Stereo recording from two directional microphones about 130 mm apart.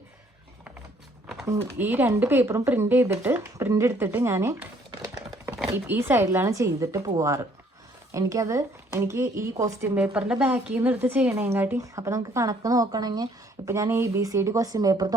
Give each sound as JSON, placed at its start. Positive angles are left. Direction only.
{"t": 1.5, "sound": "speech", "side_deg": -15}
{"t": 10.2, "sound": "speech", "side_deg": -10}